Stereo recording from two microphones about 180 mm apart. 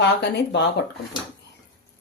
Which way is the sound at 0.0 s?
70° left (ahead or behind).